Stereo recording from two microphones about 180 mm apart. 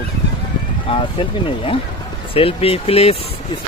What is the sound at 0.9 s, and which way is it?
Speech, 30° left (ahead or behind).